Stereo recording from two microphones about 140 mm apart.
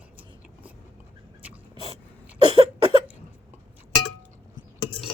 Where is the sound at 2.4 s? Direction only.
40° right (ahead or behind).